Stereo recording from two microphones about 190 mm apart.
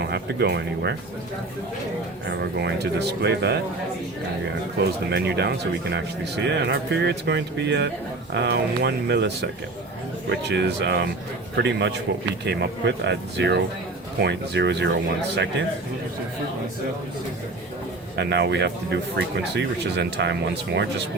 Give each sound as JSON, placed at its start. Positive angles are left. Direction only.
{"t": 0.0, "sound": "speech", "side_deg": -60}
{"t": 2.3, "sound": "speech", "side_deg": -60}
{"t": 4.8, "sound": "speech", "side_deg": -60}
{"t": 18.2, "sound": "speech", "side_deg": -65}